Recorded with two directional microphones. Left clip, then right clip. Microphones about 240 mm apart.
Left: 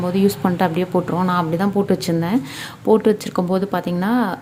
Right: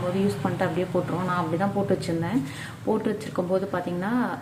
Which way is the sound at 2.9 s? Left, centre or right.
Left.